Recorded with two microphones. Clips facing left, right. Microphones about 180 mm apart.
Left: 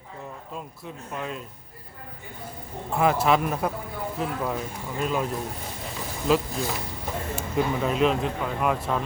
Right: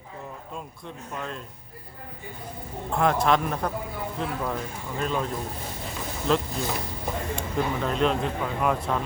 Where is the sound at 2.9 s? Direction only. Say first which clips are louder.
Left 1 dB; 5° left (ahead or behind).